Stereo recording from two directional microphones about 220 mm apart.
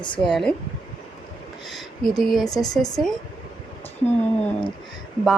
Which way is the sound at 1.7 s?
Centre (ahead or behind).